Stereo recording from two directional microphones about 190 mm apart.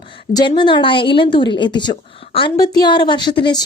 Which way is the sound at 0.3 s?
25° left (ahead or behind).